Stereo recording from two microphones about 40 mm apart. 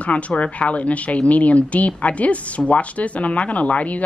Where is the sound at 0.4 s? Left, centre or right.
Left.